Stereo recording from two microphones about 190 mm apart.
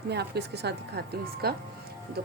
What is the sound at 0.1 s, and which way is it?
Speech, 60° right (ahead or behind).